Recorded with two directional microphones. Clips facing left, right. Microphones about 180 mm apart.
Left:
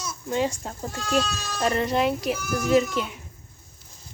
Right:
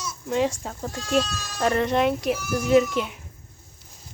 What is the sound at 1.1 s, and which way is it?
Speech, centre (ahead or behind).